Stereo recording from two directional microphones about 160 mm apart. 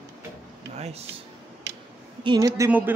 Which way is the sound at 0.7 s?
40° right (ahead or behind).